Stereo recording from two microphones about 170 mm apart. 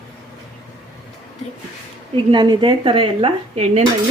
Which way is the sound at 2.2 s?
25° right (ahead or behind).